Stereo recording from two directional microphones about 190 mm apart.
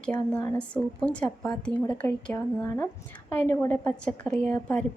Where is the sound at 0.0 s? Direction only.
5° left (ahead or behind).